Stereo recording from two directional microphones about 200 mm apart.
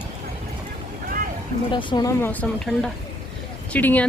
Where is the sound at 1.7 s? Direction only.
25° left (ahead or behind).